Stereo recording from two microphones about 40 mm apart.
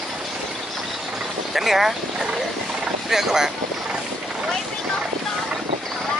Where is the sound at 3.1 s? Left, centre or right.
Centre.